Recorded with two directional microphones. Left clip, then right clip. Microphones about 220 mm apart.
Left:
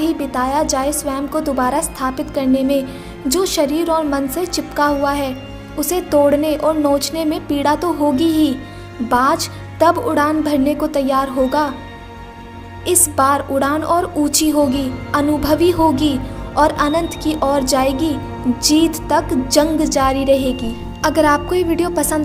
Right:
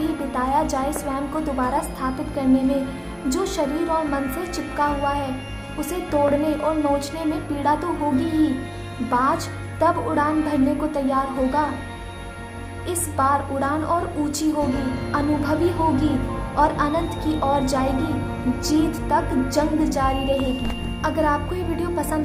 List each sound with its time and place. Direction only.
0.3 s a woman's voice: 30° left (ahead or behind)
12.8 s a woman's voice: 30° left (ahead or behind)